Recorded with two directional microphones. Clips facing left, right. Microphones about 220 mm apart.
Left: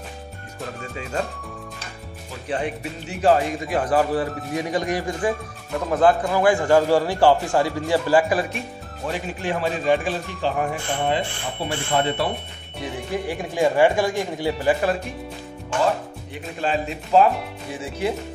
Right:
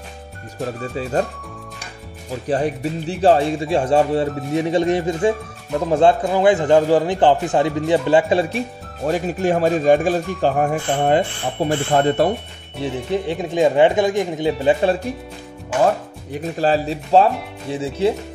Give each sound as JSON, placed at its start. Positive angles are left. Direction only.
{"t": 2.4, "sound": "speech", "side_deg": -35}
{"t": 9.0, "sound": "speech", "side_deg": -45}
{"t": 12.8, "sound": "speech", "side_deg": -25}
{"t": 16.5, "sound": "speech", "side_deg": -35}